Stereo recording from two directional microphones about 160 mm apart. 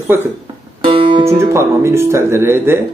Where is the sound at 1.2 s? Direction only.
15° right (ahead or behind).